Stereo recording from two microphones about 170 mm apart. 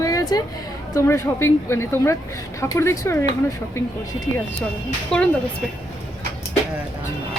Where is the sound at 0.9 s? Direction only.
15° left (ahead or behind).